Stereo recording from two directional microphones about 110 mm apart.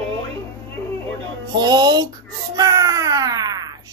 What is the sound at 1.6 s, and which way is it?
Speech, 40° right (ahead or behind).